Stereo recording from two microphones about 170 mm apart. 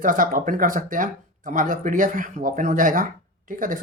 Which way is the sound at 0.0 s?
55° right (ahead or behind).